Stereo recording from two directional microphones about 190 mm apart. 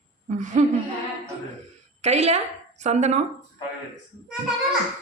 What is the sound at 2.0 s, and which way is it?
A woman's voice, 35° right (ahead or behind).